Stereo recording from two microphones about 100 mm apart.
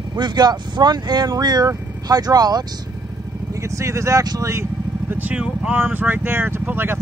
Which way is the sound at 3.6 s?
30° right (ahead or behind).